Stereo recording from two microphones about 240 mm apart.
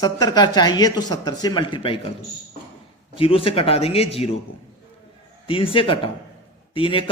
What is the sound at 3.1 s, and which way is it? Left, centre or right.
Speech, left.